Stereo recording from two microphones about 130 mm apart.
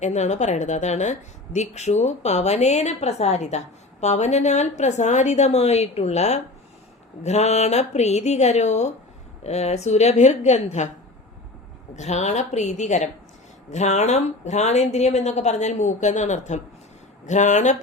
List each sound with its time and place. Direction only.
0.0 s speech: 60° left (ahead or behind)
11.9 s speech: 60° left (ahead or behind)